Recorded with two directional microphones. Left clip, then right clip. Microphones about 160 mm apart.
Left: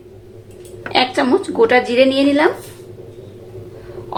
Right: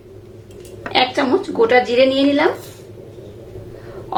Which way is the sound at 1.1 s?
20° left (ahead or behind).